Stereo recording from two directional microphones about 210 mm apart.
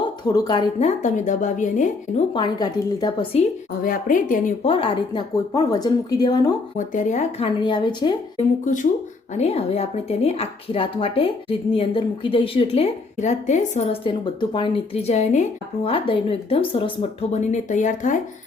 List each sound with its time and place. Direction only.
0.3 s speech: 20° left (ahead or behind); by 2.2 s 35° left (ahead or behind)
2.3 s a woman's voice: 20° left (ahead or behind); by 4.5 s 40° left (ahead or behind)
4.6 s a woman's voice: 25° left (ahead or behind)
6.7 s a woman's voice: 35° left (ahead or behind); by 8.1 s 20° left (ahead or behind)
8.6 s a woman's voice: 35° left (ahead or behind)